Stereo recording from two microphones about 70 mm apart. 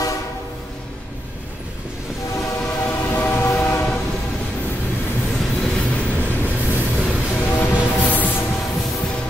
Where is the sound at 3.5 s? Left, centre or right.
Left.